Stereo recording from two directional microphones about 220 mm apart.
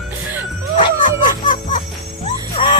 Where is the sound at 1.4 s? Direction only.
35° left (ahead or behind).